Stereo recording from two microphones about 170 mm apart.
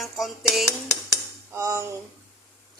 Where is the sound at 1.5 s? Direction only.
15° right (ahead or behind).